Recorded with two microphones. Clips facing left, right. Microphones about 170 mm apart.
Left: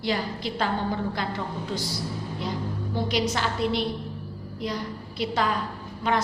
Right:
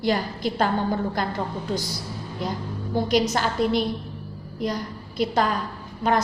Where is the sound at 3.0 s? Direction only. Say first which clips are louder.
Right 4 dB; 45° right (ahead or behind).